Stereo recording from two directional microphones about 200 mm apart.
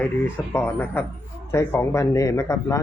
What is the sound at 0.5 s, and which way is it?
Speech, 10° left (ahead or behind).